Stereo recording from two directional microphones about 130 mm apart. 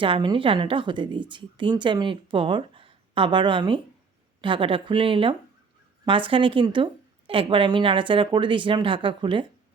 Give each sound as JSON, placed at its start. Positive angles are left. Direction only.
{"t": 0.0, "sound": "a woman's voice", "side_deg": -40}